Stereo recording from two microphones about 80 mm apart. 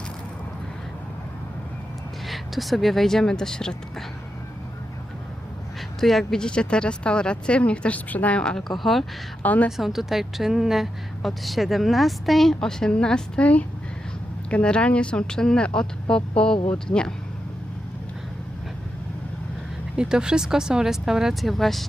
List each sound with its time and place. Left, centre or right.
2.2 s a woman's voice: centre
6.0 s speech: centre
9.4 s a woman's voice: centre
9.7 s a woman's voice: centre
20.0 s speech: centre